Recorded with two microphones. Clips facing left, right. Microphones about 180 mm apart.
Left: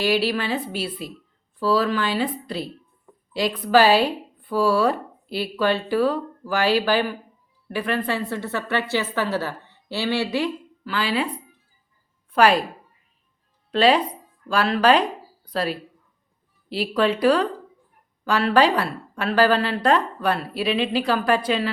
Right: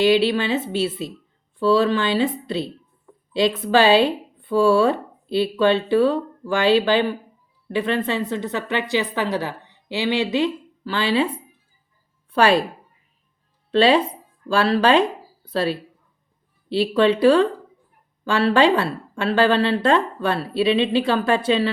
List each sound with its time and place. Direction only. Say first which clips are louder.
0.0 s speech: right 5 dB; 25° right (ahead or behind)
12.3 s speech: right 1 dB; 25° right (ahead or behind)
13.7 s speech: right 2 dB; 30° right (ahead or behind)